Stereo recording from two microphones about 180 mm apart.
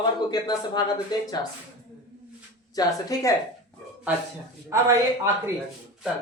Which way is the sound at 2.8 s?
20° left (ahead or behind).